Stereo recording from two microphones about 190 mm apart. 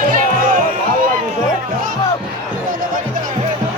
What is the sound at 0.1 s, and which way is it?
Music, 45° right (ahead or behind).